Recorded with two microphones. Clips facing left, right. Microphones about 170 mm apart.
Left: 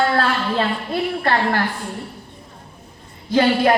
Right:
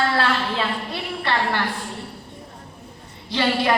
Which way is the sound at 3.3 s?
45° left (ahead or behind).